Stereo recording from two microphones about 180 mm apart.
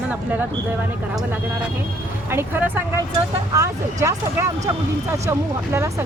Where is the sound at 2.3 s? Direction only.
10° right (ahead or behind).